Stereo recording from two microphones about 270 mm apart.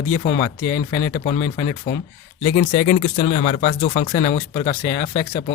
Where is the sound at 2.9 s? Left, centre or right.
Left.